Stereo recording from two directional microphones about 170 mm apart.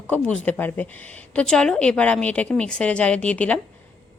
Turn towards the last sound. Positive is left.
turn(degrees=5)  # may be behind; listen again after turning